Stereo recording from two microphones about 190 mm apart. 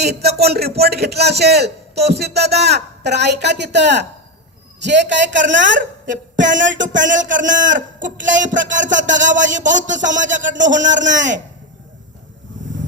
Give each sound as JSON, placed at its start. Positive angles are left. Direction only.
{"t": 0.0, "sound": "a man's voice", "side_deg": -60}
{"t": 5.7, "sound": "a woman's voice", "side_deg": -45}